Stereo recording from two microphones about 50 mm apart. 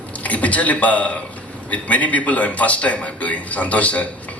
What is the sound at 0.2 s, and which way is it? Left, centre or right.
A man's voice, left.